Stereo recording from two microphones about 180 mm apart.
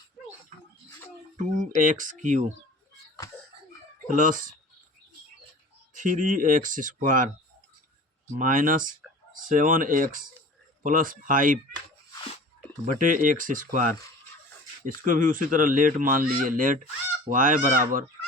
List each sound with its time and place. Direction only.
1.4 s speech: 45° right (ahead or behind)
4.1 s speech: 45° right (ahead or behind)
5.9 s speech: 45° right (ahead or behind)
8.4 s speech: 50° right (ahead or behind)
13.0 s speech: 45° right (ahead or behind)
14.8 s speech: 50° right (ahead or behind)